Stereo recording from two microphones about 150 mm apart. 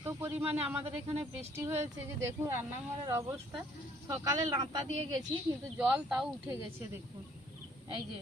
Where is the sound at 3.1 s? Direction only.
15° right (ahead or behind).